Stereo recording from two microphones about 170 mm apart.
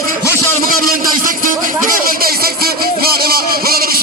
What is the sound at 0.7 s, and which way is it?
Speech, 60° right (ahead or behind).